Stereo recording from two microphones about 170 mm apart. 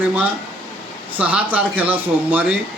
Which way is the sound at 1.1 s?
10° right (ahead or behind).